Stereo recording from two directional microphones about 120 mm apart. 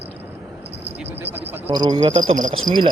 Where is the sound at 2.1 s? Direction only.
90° right.